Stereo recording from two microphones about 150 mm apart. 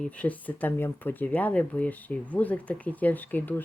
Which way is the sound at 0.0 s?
10° left (ahead or behind).